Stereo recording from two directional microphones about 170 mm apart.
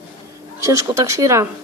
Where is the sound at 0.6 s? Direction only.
20° right (ahead or behind).